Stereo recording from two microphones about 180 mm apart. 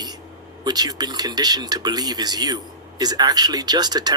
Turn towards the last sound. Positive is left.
turn(degrees=-20)  # may be behind; listen again after turning